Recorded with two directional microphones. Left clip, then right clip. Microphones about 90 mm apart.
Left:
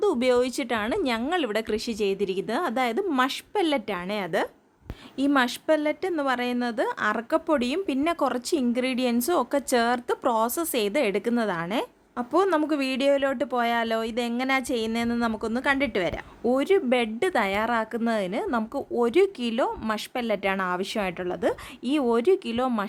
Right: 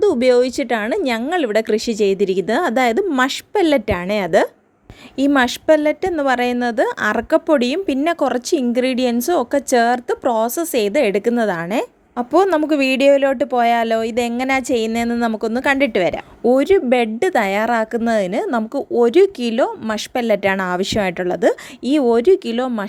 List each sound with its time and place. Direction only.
0.0 s a woman's voice: 30° right (ahead or behind); by 18.4 s 50° right (ahead or behind)
18.4 s a woman's voice: 35° right (ahead or behind)